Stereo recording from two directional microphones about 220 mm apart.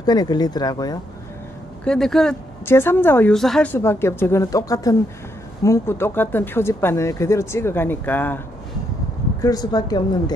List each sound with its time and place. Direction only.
0.0 s speech: 20° left (ahead or behind)
1.9 s a woman's voice: centre (ahead or behind)
9.4 s a woman's voice: 15° left (ahead or behind)